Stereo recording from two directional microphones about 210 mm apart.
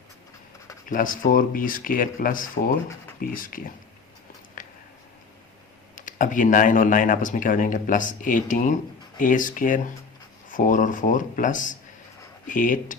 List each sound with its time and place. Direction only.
0.9 s speech: 40° left (ahead or behind)
4.6 s a sound: 40° left (ahead or behind)
6.0 s speech: 40° left (ahead or behind)